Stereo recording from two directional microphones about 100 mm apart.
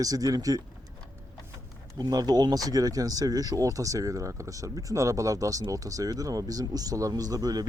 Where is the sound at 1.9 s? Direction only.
40° right (ahead or behind).